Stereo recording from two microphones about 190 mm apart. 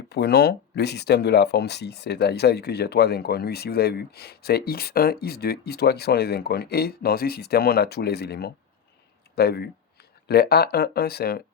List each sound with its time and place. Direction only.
0.1 s speech: 60° left (ahead or behind)